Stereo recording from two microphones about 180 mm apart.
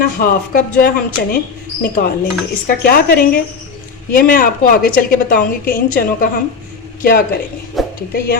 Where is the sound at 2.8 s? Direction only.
55° left (ahead or behind).